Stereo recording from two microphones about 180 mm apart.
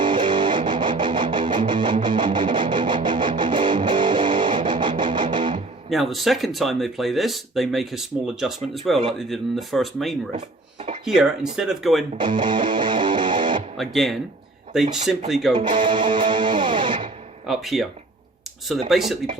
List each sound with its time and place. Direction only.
0.0 s music: 25° right (ahead or behind)
5.9 s speech: centre (ahead or behind)
12.1 s music: 25° right (ahead or behind)
13.7 s speech: centre (ahead or behind)
15.8 s music: 25° right (ahead or behind)
17.4 s speech: centre (ahead or behind)
18.9 s speech: centre (ahead or behind)